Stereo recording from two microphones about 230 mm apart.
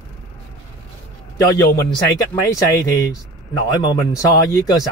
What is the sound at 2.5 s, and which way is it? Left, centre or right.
A man's voice, centre.